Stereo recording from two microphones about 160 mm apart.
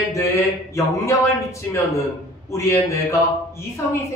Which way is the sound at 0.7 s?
20° left (ahead or behind).